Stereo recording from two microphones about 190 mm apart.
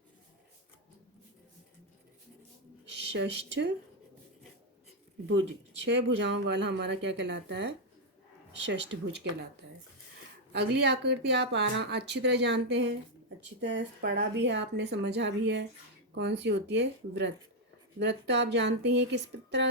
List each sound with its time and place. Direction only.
3.2 s speech: 65° right (ahead or behind)
5.8 s speech: 65° right (ahead or behind)
10.5 s a woman's voice: 60° right (ahead or behind)